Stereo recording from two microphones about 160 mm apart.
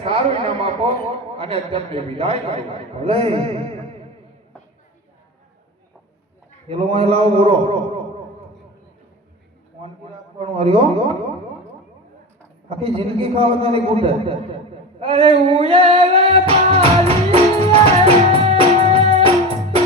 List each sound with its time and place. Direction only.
0.0 s a sound: 40° right (ahead or behind)
1.4 s a man's voice: 40° right (ahead or behind)
6.7 s a man's voice: 35° right (ahead or behind)
10.4 s a man's voice: 40° right (ahead or behind)
12.6 s a man's voice: 40° right (ahead or behind)
14.9 s music: 40° right (ahead or behind)